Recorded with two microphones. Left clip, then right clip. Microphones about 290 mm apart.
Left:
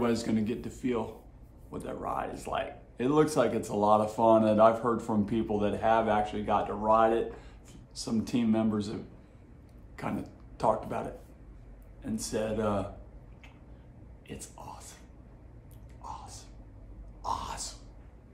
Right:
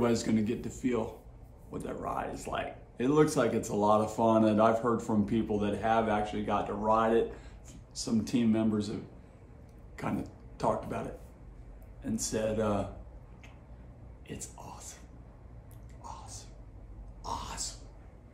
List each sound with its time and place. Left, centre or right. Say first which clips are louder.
0.0 s speech: even; centre
9.9 s speech: even; centre
14.2 s whispering: left 1 dB; centre
16.0 s a sound: left 3 dB; centre